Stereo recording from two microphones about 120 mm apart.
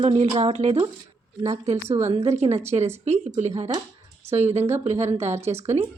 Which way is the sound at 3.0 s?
70° right (ahead or behind).